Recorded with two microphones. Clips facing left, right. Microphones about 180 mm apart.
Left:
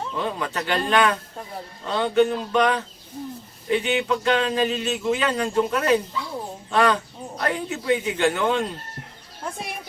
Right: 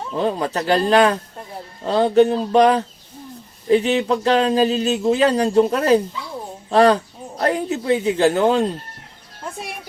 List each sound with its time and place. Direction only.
0.2 s a man's voice: 35° right (ahead or behind)